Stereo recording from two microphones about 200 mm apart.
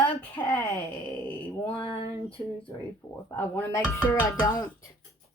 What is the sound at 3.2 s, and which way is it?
Speech, 15° left (ahead or behind).